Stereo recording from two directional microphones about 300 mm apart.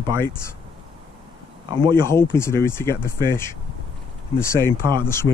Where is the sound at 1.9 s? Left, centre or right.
Centre.